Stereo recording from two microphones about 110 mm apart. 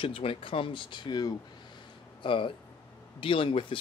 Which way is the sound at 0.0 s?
55° left (ahead or behind).